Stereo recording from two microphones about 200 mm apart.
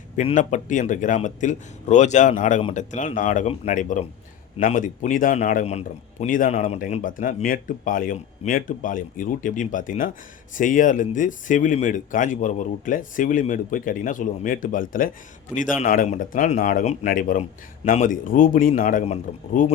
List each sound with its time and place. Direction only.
0.2 s a man's voice: 40° left (ahead or behind)